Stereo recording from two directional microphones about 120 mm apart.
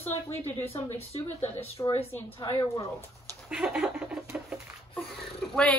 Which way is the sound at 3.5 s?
5° right (ahead or behind).